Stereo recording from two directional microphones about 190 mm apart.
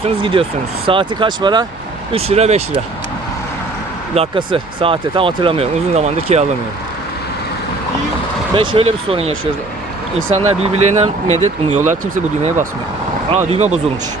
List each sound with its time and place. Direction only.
0.0 s speech: 30° right (ahead or behind)
4.1 s speech: 30° right (ahead or behind)
8.5 s speech: 25° right (ahead or behind)
10.3 s speech: 35° right (ahead or behind)